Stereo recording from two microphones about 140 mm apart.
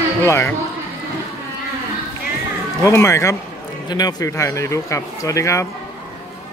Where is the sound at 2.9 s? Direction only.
20° left (ahead or behind).